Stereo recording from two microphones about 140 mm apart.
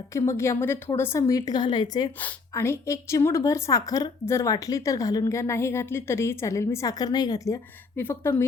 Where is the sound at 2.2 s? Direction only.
15° left (ahead or behind).